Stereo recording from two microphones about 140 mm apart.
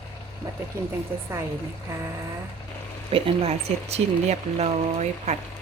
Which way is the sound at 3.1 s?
45° right (ahead or behind).